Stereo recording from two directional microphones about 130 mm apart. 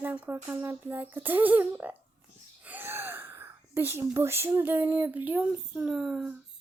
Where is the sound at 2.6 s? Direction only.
15° right (ahead or behind).